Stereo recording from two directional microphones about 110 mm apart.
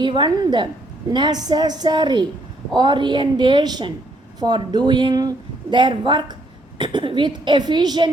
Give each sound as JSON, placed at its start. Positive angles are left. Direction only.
{"t": 0.0, "sound": "a woman's voice", "side_deg": -45}